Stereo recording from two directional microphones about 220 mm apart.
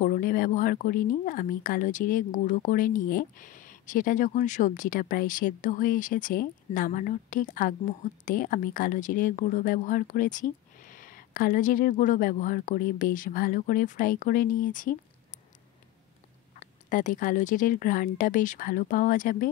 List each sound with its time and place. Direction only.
0.0 s speech: 40° left (ahead or behind)
16.5 s speech: 35° left (ahead or behind)